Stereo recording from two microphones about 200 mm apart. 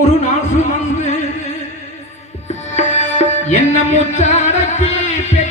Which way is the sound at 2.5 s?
35° left (ahead or behind).